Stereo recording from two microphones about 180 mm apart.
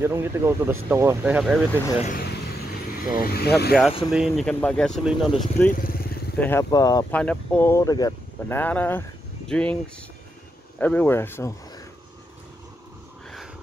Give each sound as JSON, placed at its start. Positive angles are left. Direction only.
{"t": 0.0, "sound": "speech", "side_deg": -15}
{"t": 2.0, "sound": "speech", "side_deg": 60}
{"t": 4.1, "sound": "speech", "side_deg": 0}
{"t": 5.7, "sound": "vehicle", "side_deg": 50}
{"t": 6.4, "sound": "speech", "side_deg": 5}
{"t": 6.7, "sound": "speech", "side_deg": 20}
{"t": 7.1, "sound": "speech", "side_deg": 10}
{"t": 10.8, "sound": "speech", "side_deg": 10}